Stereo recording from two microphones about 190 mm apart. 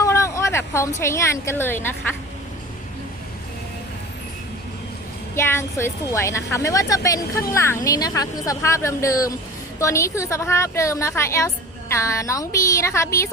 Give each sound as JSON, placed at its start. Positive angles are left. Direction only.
{"t": 0.0, "sound": "speech", "side_deg": 15}
{"t": 5.3, "sound": "a woman's voice", "side_deg": 15}